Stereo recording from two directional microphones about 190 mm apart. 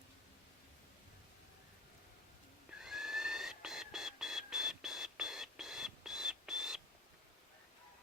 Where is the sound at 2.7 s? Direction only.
Centre (ahead or behind).